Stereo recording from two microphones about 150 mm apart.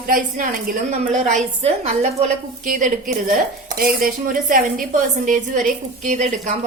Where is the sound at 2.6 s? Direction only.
60° right (ahead or behind).